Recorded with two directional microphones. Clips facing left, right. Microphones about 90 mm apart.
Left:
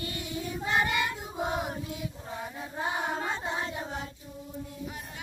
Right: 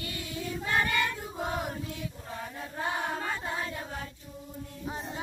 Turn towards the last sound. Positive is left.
turn(degrees=20)  # may be behind; listen again after turning